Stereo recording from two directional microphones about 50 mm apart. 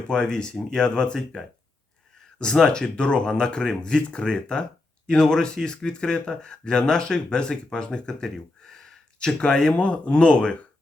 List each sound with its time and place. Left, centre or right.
0.1 s speech: centre
2.4 s speech: centre